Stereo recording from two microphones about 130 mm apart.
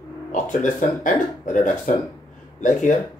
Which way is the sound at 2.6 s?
75° left (ahead or behind).